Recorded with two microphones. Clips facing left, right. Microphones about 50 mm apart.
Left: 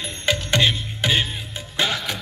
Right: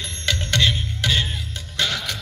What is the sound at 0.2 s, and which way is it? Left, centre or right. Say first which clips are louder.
Music: left 2 dB; centre.